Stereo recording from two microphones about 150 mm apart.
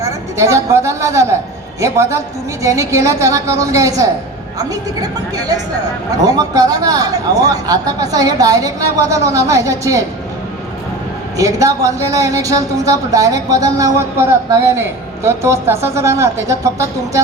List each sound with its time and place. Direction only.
0.0 s a woman's voice: 20° right (ahead or behind)
11.3 s speech: 20° right (ahead or behind)